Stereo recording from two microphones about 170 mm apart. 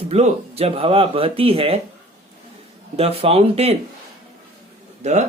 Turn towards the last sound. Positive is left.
turn(degrees=-45)  # may be behind; listen again after turning